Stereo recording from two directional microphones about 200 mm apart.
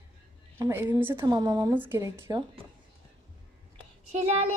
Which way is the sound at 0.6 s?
10° right (ahead or behind).